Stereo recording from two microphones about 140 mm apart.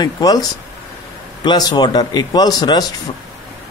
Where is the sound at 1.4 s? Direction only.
30° left (ahead or behind).